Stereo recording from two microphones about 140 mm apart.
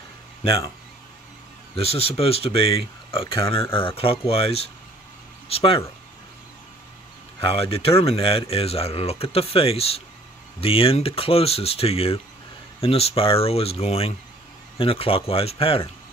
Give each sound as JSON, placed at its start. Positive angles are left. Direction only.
{"t": 1.8, "sound": "speech", "side_deg": 45}
{"t": 7.3, "sound": "speech", "side_deg": 45}